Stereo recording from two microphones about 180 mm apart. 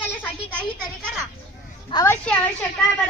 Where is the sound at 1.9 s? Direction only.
15° left (ahead or behind).